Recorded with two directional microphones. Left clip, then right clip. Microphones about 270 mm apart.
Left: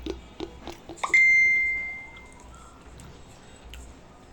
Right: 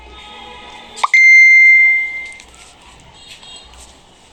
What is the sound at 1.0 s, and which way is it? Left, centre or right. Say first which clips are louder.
Beep: right 10 dB; right.